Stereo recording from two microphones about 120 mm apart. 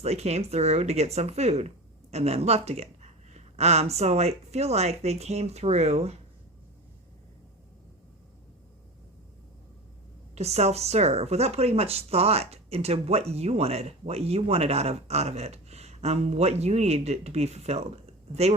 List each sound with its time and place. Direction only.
0.0 s speech: 65° right (ahead or behind)
10.3 s speech: 65° right (ahead or behind)